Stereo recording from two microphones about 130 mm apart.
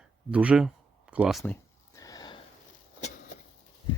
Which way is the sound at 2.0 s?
30° left (ahead or behind).